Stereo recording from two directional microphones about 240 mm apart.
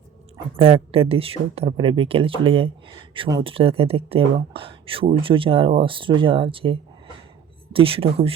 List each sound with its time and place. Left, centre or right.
0.6 s a woman's voice: right